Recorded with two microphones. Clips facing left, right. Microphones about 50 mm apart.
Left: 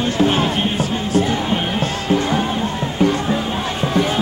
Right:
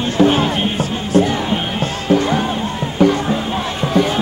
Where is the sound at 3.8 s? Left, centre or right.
Centre.